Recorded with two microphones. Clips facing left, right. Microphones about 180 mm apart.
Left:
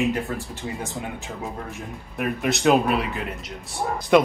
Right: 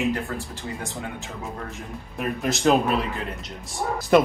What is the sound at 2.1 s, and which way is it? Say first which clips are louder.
Speech: left 2 dB; centre (ahead or behind).